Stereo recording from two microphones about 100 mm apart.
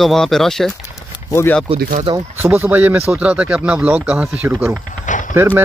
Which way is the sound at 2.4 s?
20° right (ahead or behind).